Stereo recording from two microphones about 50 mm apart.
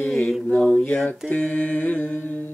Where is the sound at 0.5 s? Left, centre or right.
Centre.